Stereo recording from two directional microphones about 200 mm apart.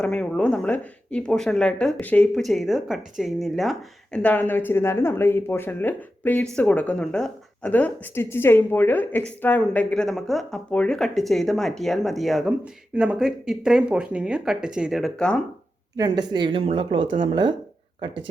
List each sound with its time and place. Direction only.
0.0 s a woman's voice: 5° left (ahead or behind)
16.0 s speech: 20° right (ahead or behind)